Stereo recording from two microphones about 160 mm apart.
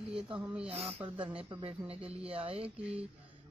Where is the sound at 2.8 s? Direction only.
5° right (ahead or behind).